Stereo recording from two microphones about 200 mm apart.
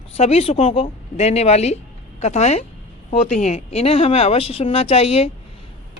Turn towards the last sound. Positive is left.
turn(degrees=30)  # may be behind; listen again after turning